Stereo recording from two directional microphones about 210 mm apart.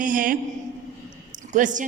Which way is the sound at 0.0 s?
40° right (ahead or behind).